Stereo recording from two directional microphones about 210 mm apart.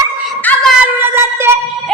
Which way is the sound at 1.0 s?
10° right (ahead or behind).